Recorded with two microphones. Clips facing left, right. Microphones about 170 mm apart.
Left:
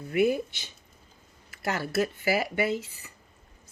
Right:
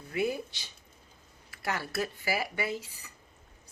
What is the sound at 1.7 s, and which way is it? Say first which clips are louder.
Speech: left 6 dB; 25° left (ahead or behind).